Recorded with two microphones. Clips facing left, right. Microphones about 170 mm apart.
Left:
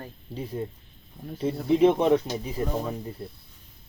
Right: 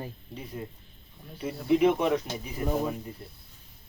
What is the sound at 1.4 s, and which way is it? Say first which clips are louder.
Speech: left 3 dB; 30° left (ahead or behind).